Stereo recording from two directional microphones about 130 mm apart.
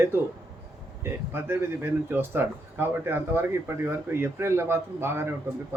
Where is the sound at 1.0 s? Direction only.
20° right (ahead or behind).